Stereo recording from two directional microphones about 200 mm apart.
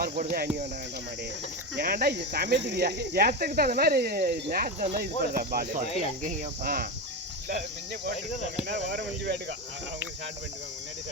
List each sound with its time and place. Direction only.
0.0 s cricket: 45° right (ahead or behind)
1.7 s cricket: 55° right (ahead or behind)
8.6 s speech: 55° right (ahead or behind)